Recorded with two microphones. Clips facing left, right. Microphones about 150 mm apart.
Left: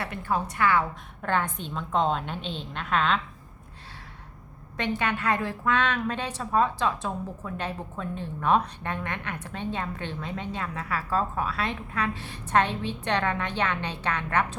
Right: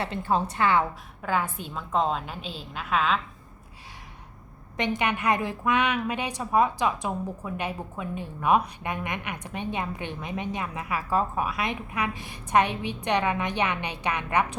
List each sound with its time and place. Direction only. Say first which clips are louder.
0.0 s a woman's voice: right 3 dB; 25° right (ahead or behind)
1.2 s a woman's voice: even; 5° right (ahead or behind)
4.8 s a woman's voice: right 1 dB; 15° right (ahead or behind)